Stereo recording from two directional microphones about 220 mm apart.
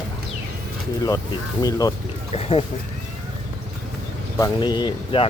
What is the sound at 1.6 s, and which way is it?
Speech, 15° left (ahead or behind).